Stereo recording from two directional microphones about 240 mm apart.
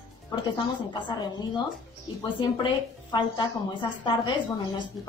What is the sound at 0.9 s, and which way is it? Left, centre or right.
A woman's voice, centre.